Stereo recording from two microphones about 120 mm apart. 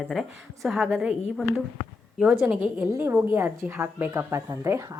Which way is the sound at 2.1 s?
5° right (ahead or behind).